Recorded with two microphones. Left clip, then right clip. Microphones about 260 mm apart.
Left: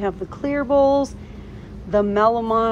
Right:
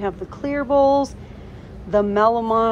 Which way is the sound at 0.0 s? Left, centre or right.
Centre.